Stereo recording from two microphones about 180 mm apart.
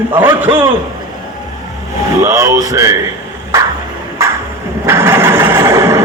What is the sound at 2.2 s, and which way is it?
Speech, 20° right (ahead or behind).